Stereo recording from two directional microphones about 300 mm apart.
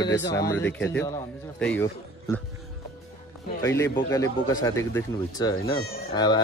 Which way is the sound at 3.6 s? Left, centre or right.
Centre.